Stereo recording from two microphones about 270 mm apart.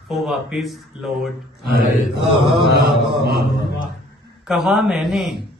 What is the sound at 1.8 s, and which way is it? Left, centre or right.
Mantra, left.